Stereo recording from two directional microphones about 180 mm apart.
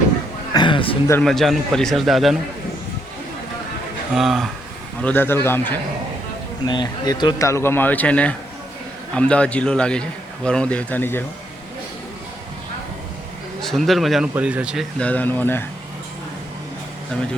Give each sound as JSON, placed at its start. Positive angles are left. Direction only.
{"t": 0.5, "sound": "a sound", "side_deg": 25}
{"t": 1.2, "sound": "a man's voice", "side_deg": 0}
{"t": 4.1, "sound": "a man's voice", "side_deg": 0}
{"t": 5.0, "sound": "speech", "side_deg": 10}
{"t": 6.7, "sound": "a man's voice", "side_deg": 25}
{"t": 13.6, "sound": "a man's voice", "side_deg": 0}